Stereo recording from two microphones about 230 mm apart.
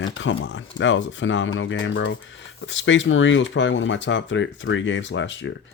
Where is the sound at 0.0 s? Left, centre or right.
Left.